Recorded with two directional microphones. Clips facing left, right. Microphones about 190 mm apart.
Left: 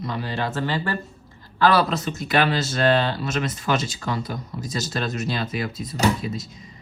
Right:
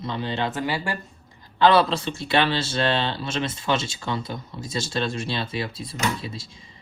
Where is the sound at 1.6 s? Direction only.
25° right (ahead or behind).